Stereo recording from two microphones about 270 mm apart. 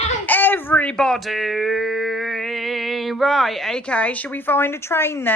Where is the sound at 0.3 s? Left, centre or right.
Centre.